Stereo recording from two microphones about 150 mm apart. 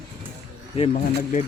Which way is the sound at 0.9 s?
55° left (ahead or behind).